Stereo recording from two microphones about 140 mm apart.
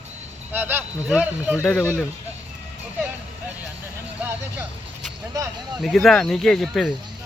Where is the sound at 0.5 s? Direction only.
15° right (ahead or behind).